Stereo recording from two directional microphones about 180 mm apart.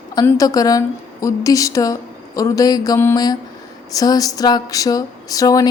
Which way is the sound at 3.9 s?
20° left (ahead or behind).